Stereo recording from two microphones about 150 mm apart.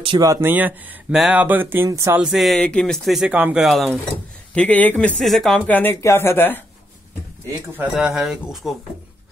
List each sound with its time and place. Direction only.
0.2 s speech: 20° right (ahead or behind)
2.2 s speech: centre (ahead or behind)
7.7 s speech: 10° right (ahead or behind)